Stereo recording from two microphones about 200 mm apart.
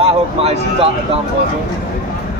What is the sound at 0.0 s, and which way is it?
Speech, 30° right (ahead or behind).